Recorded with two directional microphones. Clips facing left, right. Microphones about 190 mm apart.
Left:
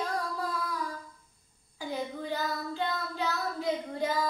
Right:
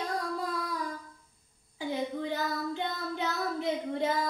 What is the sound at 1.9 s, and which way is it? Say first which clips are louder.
Child singing: right 2 dB; 20° right (ahead or behind).